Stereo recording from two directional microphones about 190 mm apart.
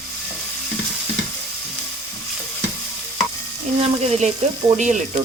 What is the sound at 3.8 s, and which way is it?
Speech, 35° right (ahead or behind).